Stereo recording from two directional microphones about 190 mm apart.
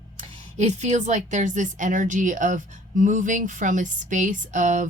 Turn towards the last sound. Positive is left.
turn(degrees=-40)  # may be behind; listen again after turning